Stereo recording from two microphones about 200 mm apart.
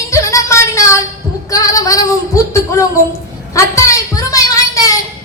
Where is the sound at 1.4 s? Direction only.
15° left (ahead or behind).